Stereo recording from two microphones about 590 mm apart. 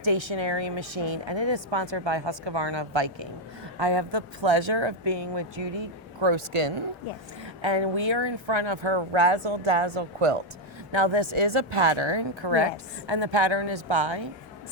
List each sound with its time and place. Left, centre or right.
0.0 s speech: right